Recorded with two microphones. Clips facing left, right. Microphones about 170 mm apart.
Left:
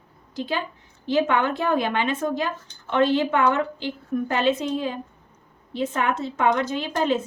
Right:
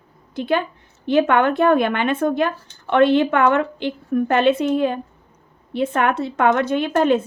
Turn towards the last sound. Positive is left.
turn(degrees=-55)  # may be behind; listen again after turning